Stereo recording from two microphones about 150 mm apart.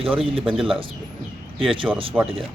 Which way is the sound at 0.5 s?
5° right (ahead or behind).